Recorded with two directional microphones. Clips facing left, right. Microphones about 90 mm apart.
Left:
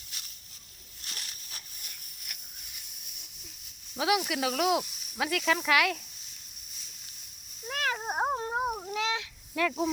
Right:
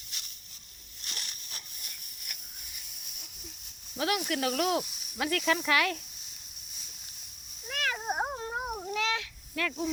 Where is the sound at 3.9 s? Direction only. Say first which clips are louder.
Left 2 dB; 10° left (ahead or behind).